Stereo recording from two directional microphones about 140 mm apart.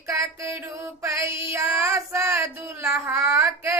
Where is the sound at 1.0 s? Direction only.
20° right (ahead or behind).